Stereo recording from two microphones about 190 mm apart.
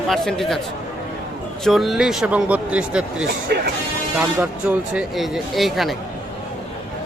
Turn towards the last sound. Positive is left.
turn(degrees=0)  # may be behind; listen again after turning